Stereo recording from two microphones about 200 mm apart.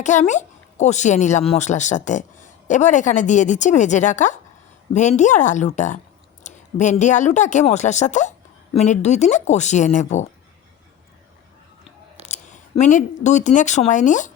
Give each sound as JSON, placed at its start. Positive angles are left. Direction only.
{"t": 0.0, "sound": "a woman's voice", "side_deg": 35}
{"t": 12.2, "sound": "speech", "side_deg": 35}